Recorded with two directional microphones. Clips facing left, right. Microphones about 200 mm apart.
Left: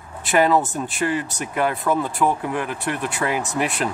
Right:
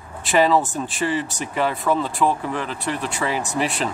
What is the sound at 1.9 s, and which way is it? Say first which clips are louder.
Speech: even; 15° left (ahead or behind).